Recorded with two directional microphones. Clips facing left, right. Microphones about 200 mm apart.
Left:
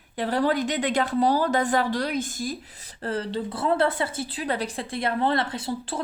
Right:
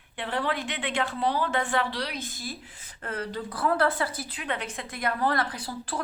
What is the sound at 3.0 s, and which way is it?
Speech, 30° left (ahead or behind).